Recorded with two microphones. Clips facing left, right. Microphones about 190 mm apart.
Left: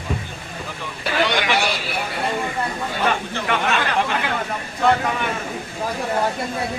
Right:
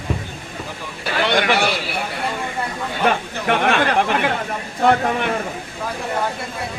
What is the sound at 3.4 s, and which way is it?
Speech, 50° right (ahead or behind).